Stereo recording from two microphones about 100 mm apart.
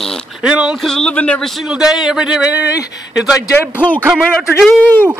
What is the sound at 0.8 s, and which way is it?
Speech, 10° left (ahead or behind).